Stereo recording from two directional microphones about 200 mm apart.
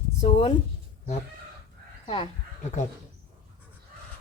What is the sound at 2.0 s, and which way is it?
Speech, 25° left (ahead or behind).